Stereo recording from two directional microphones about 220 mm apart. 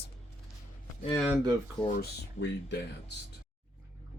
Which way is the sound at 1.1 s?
Centre (ahead or behind).